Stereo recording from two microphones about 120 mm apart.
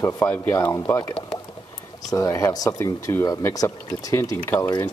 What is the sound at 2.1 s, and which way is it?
Speech, 25° left (ahead or behind).